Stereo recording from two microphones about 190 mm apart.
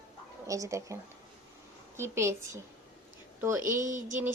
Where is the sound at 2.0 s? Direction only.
15° right (ahead or behind).